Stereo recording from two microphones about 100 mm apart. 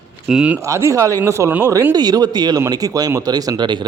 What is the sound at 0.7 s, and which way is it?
Speech, 30° right (ahead or behind).